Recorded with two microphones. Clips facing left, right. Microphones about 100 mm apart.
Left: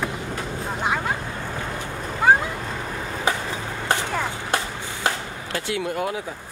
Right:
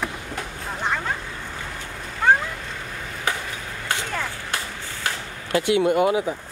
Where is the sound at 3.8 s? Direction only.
20° left (ahead or behind).